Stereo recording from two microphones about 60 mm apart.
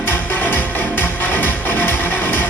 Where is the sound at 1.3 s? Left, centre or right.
Left.